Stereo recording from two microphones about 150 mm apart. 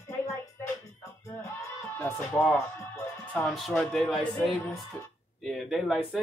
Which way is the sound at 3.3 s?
5° left (ahead or behind).